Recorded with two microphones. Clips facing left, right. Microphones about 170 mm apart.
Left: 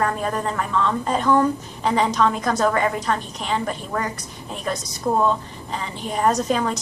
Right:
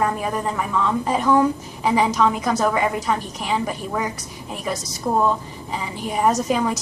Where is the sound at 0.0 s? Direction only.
10° right (ahead or behind).